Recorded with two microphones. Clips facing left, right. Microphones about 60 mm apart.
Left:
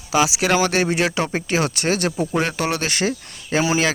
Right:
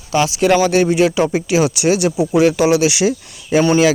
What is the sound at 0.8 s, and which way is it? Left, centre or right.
Speech, centre.